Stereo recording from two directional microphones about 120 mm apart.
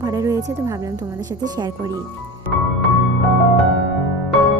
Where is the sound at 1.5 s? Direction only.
35° right (ahead or behind).